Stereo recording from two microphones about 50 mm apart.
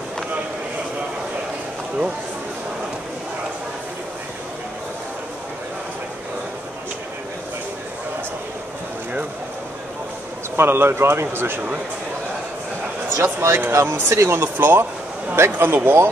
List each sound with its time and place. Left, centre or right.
10.5 s speech: right
13.1 s speech: right
14.4 s speech: right
15.3 s speech: right